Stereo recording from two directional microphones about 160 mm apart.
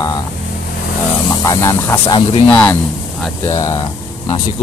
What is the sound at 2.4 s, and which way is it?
Speech, 10° left (ahead or behind).